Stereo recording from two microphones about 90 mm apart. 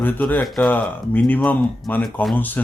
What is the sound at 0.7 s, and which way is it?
Speech, 20° left (ahead or behind).